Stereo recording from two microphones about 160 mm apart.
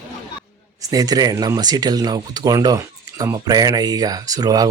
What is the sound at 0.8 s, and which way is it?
Speech, 25° right (ahead or behind).